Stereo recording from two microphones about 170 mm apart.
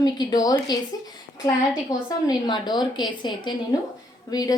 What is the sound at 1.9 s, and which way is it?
A woman's voice, 20° left (ahead or behind).